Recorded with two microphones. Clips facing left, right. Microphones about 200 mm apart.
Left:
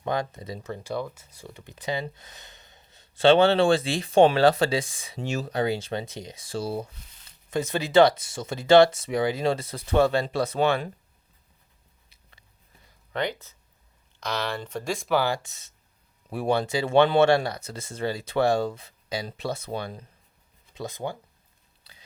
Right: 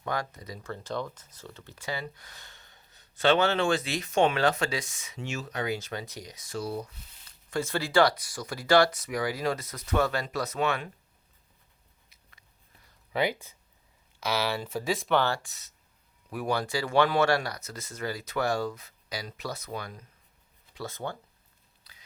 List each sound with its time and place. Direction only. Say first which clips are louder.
0.0 s speech: left 5 dB; 25° left (ahead or behind)
12.0 s biting: left 2 dB; 30° left (ahead or behind)
13.1 s speech: right 1 dB; 10° right (ahead or behind); by 15.4 s 10° left (ahead or behind)
15.4 s speech: left 2 dB; 25° left (ahead or behind)
20.7 s speech: left 3 dB; 15° left (ahead or behind)
21.9 s biting: left 4 dB; 30° left (ahead or behind)